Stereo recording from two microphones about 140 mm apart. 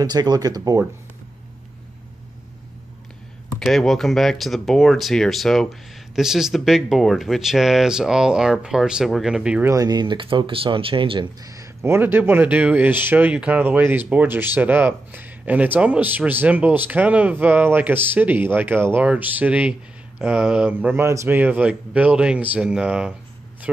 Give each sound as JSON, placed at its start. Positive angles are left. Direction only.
{"t": 0.0, "sound": "speech", "side_deg": -30}
{"t": 3.5, "sound": "speech", "side_deg": 0}
{"t": 9.7, "sound": "speech", "side_deg": -25}
{"t": 11.4, "sound": "speech", "side_deg": -25}